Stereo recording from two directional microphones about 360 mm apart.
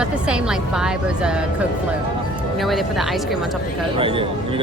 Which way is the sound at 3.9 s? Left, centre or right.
Centre.